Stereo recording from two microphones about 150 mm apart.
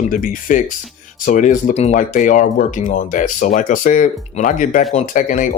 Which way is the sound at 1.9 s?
60° left (ahead or behind).